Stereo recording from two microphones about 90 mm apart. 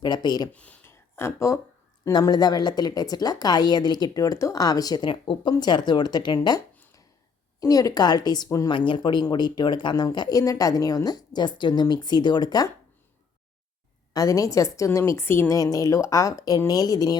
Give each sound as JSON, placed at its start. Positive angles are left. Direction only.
{"t": 0.0, "sound": "speech", "side_deg": 55}
{"t": 0.5, "sound": "speech", "side_deg": 15}
{"t": 0.9, "sound": "a sound", "side_deg": 30}
{"t": 2.1, "sound": "speech", "side_deg": 50}
{"t": 7.6, "sound": "speech", "side_deg": 40}
{"t": 8.4, "sound": "a woman's voice", "side_deg": 35}
{"t": 8.7, "sound": "speech", "side_deg": 65}
{"t": 14.1, "sound": "a woman's voice", "side_deg": 40}
{"t": 15.5, "sound": "a woman's voice", "side_deg": 40}